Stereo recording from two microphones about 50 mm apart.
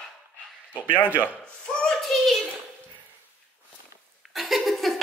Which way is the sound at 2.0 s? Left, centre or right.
Centre.